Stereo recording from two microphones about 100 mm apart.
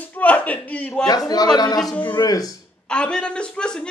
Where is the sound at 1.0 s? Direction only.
40° left (ahead or behind).